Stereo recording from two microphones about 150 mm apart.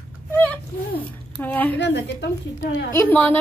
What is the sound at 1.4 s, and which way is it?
Speech, 10° left (ahead or behind).